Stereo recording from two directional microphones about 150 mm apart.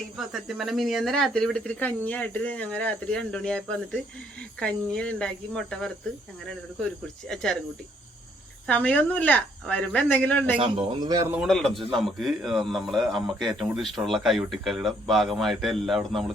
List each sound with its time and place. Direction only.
0.2 s a man's voice: centre (ahead or behind)
8.6 s speech: 10° left (ahead or behind)
10.6 s speech: 35° right (ahead or behind)
11.4 s a man's voice: 5° left (ahead or behind)